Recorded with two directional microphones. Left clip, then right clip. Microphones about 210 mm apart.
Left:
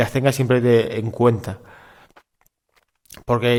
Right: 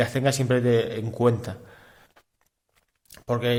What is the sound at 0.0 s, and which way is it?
Speech, 25° left (ahead or behind).